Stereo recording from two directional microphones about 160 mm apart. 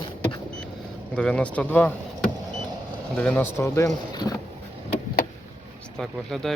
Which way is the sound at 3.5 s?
15° left (ahead or behind).